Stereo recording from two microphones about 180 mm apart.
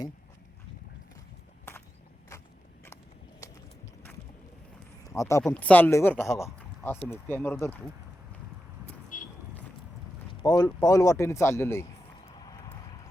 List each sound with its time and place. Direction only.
5.0 s a sound: 20° left (ahead or behind)
5.5 s speech: 10° left (ahead or behind)
9.1 s vehicle: 45° left (ahead or behind)
10.4 s speech: 20° left (ahead or behind)